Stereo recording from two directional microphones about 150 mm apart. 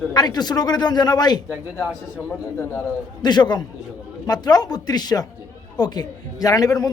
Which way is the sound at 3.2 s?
30° left (ahead or behind).